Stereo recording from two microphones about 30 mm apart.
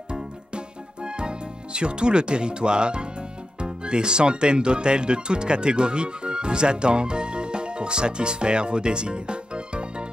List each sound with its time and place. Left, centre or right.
1.0 s speech: right